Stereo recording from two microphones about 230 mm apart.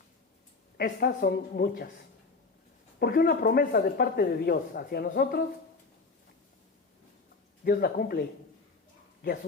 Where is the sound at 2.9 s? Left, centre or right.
Left.